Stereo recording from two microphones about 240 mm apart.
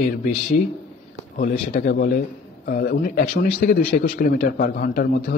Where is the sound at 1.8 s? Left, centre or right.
Left.